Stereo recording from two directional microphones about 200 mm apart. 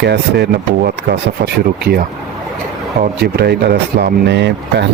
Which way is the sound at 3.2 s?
55° right (ahead or behind).